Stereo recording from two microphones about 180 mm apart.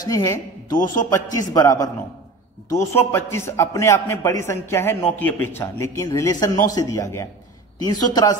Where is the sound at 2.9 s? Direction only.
15° left (ahead or behind).